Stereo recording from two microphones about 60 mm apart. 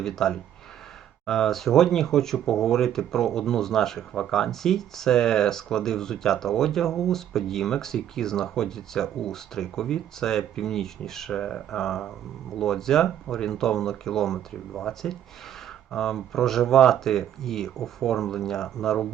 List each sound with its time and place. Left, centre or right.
0.0 s speech: centre